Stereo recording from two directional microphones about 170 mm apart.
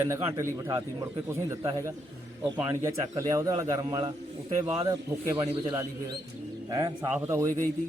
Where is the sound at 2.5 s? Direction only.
20° right (ahead or behind).